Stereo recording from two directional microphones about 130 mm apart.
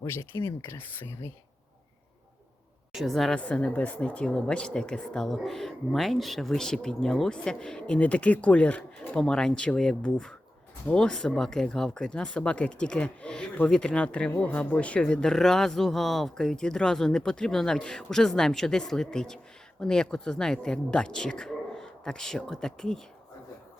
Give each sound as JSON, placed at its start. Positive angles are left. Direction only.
{"t": 0.0, "sound": "speech", "side_deg": 25}
{"t": 2.9, "sound": "speech", "side_deg": 0}